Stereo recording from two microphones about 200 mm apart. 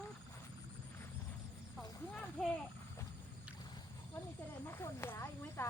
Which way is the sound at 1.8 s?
5° left (ahead or behind).